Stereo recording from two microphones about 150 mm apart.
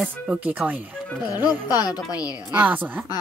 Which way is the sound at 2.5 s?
10° right (ahead or behind).